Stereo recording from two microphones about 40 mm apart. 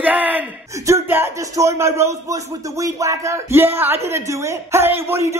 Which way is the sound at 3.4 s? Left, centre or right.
Right.